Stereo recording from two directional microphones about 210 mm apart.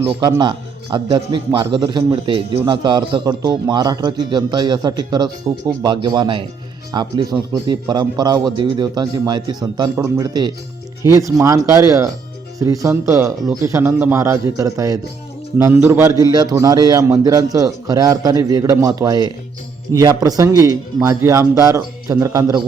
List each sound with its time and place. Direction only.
0.0 s a man's voice: 20° right (ahead or behind)